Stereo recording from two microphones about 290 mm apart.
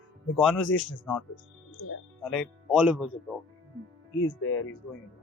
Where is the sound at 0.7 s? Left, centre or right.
Left.